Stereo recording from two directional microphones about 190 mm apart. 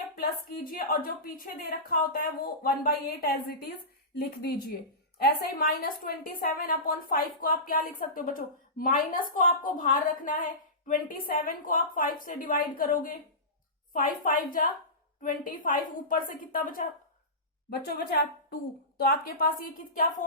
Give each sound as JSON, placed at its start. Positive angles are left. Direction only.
{"t": 0.2, "sound": "a woman's voice", "side_deg": 50}
{"t": 17.7, "sound": "a woman's voice", "side_deg": 55}